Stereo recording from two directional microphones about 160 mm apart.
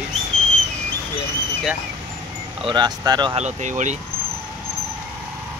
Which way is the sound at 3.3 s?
50° right (ahead or behind).